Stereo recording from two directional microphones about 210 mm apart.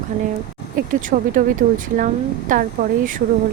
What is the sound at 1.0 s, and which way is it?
Speech, 40° right (ahead or behind).